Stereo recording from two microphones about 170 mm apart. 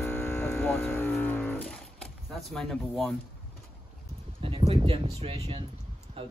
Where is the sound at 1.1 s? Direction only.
10° left (ahead or behind).